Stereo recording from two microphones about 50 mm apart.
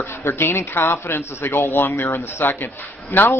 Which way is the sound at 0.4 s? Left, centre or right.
Left.